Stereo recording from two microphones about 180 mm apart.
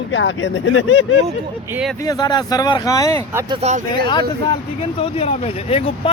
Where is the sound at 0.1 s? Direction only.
90° left.